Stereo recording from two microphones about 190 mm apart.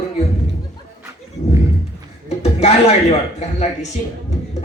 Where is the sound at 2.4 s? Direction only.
35° left (ahead or behind).